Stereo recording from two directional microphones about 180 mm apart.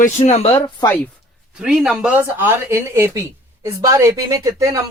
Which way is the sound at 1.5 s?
5° right (ahead or behind).